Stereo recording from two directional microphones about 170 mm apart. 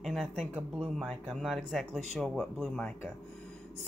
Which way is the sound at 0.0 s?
Centre (ahead or behind).